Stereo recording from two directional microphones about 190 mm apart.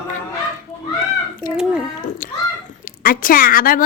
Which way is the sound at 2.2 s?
50° left (ahead or behind).